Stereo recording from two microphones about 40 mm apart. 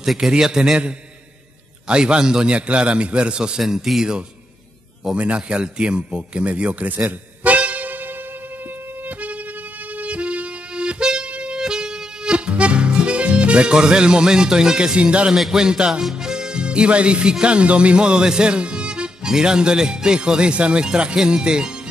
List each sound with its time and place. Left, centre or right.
0.0 s a man's voice: centre
0.3 s music: centre
1.9 s a man's voice: right
3.6 s music: centre
5.1 s a man's voice: right
7.4 s music: right; by 15.0 s centre
15.0 s a man's voice: right
15.5 s music: centre
16.2 s speech: centre